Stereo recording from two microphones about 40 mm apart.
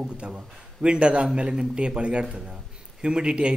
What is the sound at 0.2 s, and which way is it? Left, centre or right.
A man's voice, right.